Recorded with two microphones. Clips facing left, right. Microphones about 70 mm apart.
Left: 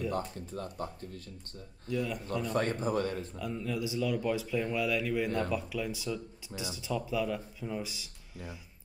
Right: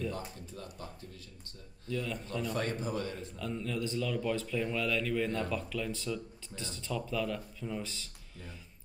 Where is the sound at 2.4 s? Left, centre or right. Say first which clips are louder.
Left 4 dB; left.